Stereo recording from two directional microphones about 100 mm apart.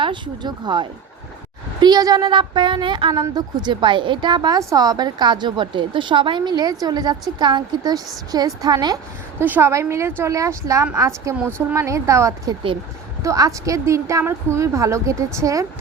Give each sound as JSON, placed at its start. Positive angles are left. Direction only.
{"t": 0.0, "sound": "a woman's voice", "side_deg": -50}
{"t": 9.4, "sound": "a woman's voice", "side_deg": -20}